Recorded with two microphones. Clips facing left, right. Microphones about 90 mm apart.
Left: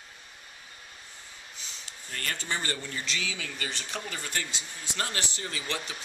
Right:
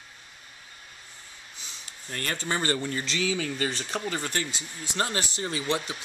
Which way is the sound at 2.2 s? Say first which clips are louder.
Right 5 dB; 40° right (ahead or behind).